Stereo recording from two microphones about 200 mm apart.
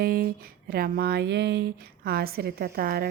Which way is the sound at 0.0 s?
50° right (ahead or behind).